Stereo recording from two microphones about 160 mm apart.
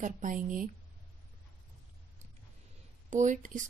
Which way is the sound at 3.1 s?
50° right (ahead or behind).